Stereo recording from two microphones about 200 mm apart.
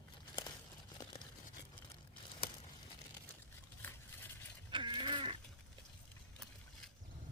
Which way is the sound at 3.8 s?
10° left (ahead or behind).